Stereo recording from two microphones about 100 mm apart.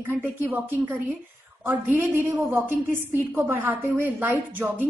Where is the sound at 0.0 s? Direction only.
20° right (ahead or behind).